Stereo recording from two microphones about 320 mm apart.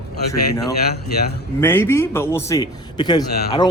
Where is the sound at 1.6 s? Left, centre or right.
Centre.